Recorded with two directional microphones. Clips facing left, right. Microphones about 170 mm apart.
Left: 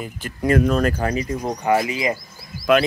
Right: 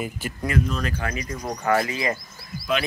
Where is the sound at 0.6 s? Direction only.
55° left (ahead or behind); by 1.2 s 35° left (ahead or behind).